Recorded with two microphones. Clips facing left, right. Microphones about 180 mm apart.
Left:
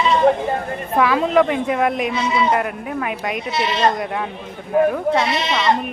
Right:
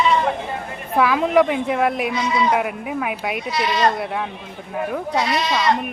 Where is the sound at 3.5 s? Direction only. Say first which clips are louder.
Left 1 dB; 25° left (ahead or behind).